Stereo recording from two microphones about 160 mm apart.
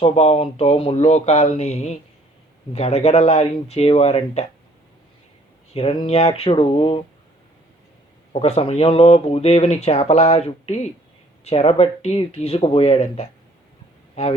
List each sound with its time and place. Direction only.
0.0 s speech: 40° left (ahead or behind)
5.7 s speech: 35° left (ahead or behind)
8.3 s speech: 40° left (ahead or behind)